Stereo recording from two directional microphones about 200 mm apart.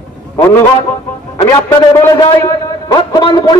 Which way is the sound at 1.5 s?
15° left (ahead or behind).